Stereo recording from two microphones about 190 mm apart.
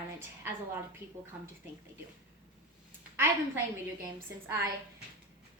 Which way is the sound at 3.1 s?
15° right (ahead or behind).